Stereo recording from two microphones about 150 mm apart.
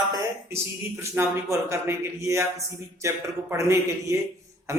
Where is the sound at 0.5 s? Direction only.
15° right (ahead or behind).